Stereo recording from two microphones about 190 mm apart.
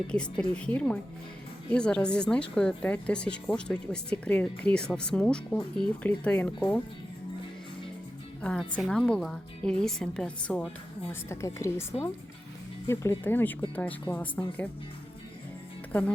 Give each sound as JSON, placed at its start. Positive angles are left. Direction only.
{"t": 0.1, "sound": "a woman's voice", "side_deg": 5}
{"t": 8.4, "sound": "a woman's voice", "side_deg": 5}
{"t": 11.1, "sound": "a woman's voice", "side_deg": 15}
{"t": 15.9, "sound": "speech", "side_deg": 10}